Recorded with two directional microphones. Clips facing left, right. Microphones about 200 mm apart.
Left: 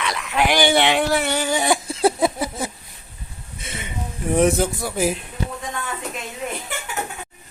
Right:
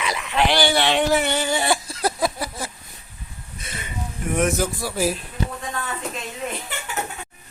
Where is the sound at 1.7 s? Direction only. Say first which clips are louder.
Left 4 dB; 25° left (ahead or behind).